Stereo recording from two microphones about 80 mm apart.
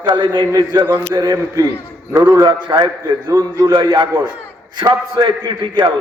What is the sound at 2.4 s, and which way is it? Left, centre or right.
Speech, right.